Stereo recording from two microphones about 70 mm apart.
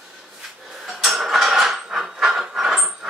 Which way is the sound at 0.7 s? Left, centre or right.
Centre.